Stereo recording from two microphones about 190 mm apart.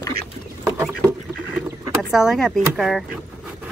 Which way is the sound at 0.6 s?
15° right (ahead or behind).